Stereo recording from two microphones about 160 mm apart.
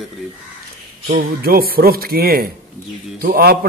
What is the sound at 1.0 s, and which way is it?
A man's voice, 70° right (ahead or behind).